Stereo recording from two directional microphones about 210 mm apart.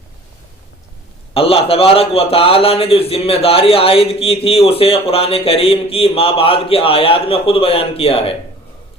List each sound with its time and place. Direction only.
1.3 s a man's voice: 25° left (ahead or behind)